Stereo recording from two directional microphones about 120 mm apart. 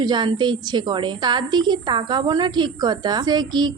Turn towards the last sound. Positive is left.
turn(degrees=-35)  # may be behind; listen again after turning